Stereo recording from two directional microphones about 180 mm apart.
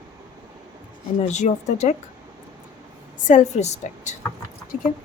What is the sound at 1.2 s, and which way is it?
Speech, 40° left (ahead or behind).